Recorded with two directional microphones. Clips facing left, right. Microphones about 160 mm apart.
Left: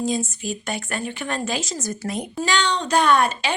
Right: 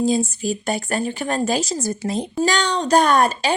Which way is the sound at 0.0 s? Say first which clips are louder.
Right 5 dB; 35° right (ahead or behind).